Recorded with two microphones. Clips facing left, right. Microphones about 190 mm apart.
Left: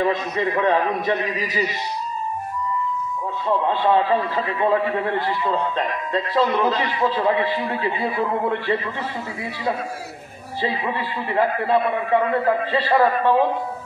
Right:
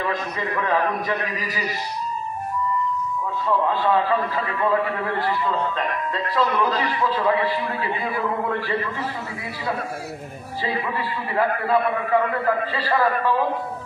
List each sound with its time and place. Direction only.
0.0 s a man's voice: 25° left (ahead or behind)
3.4 s a man's voice: 30° left (ahead or behind)
6.3 s a man's voice: 25° left (ahead or behind)
10.6 s a man's voice: 25° left (ahead or behind)